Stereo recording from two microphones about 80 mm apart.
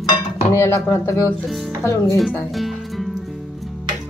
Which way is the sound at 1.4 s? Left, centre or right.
Centre.